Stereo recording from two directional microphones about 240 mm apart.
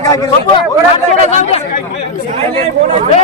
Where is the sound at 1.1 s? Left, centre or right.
Left.